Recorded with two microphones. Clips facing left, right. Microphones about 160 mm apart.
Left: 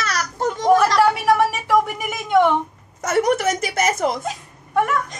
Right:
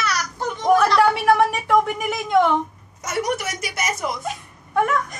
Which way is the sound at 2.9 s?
55° left (ahead or behind).